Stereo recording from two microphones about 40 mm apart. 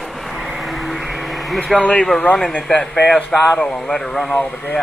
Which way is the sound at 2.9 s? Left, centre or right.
Centre.